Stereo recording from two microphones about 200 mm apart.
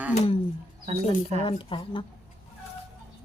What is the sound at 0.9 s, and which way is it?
Speech, 30° right (ahead or behind).